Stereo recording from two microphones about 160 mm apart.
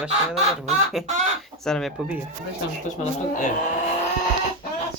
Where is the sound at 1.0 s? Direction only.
45° right (ahead or behind).